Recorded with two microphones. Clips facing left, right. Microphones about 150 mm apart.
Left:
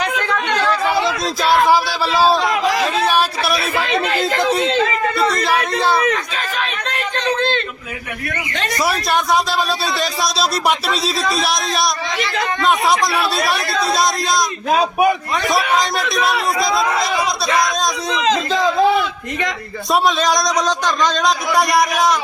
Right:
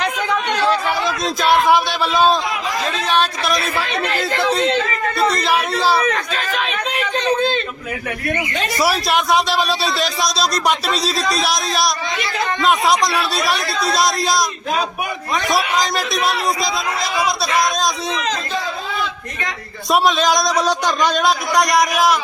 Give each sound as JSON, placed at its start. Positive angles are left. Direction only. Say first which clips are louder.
{"t": 0.5, "sound": "chatter", "louder": "even", "side_deg": -25}
{"t": 0.9, "sound": "a sound", "louder": "left 3 dB", "side_deg": 15}
{"t": 1.2, "sound": "speech", "louder": "right 2 dB", "side_deg": 0}
{"t": 2.9, "sound": "a sound", "louder": "left 2 dB", "side_deg": 10}
{"t": 3.8, "sound": "speech", "louder": "left 3 dB", "side_deg": 20}
{"t": 5.1, "sound": "speech", "louder": "right 4 dB", "side_deg": 0}
{"t": 7.2, "sound": "a sound", "louder": "right 1 dB", "side_deg": -5}
{"t": 8.5, "sound": "a man's voice", "louder": "left 1 dB", "side_deg": 0}
{"t": 14.7, "sound": "a man's voice", "louder": "left 7 dB", "side_deg": 40}
{"t": 15.4, "sound": "a man's voice", "louder": "left 1 dB", "side_deg": 0}
{"t": 18.5, "sound": "a sound", "louder": "left 9 dB", "side_deg": 90}
{"t": 19.9, "sound": "a man's voice", "louder": "right 1 dB", "side_deg": 0}